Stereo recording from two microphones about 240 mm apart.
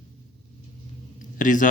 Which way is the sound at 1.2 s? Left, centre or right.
Left.